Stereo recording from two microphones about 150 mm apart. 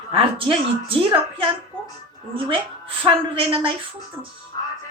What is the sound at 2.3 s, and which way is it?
A woman's voice, 35° right (ahead or behind).